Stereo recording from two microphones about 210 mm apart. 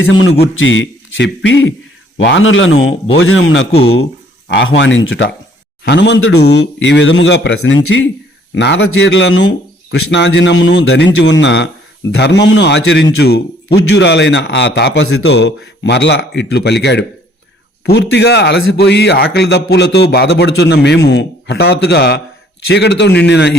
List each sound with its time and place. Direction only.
0.1 s a man's voice: 70° left (ahead or behind)
3.7 s speech: 25° left (ahead or behind)
4.4 s a man's voice: 55° left (ahead or behind)
5.8 s a man's voice: 55° left (ahead or behind)